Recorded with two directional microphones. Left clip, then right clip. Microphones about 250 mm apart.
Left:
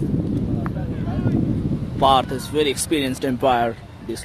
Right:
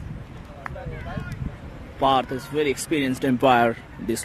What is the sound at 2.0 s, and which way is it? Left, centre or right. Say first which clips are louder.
Speech: left 4 dB; centre.